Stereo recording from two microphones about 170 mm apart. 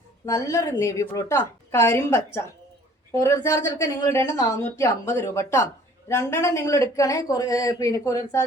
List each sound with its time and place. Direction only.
0.3 s a woman's voice: 20° left (ahead or behind)